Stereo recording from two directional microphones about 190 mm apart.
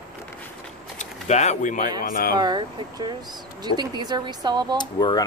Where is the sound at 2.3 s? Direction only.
20° right (ahead or behind).